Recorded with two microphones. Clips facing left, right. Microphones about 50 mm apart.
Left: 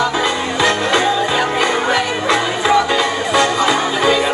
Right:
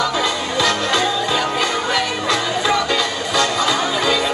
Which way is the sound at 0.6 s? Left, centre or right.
Left.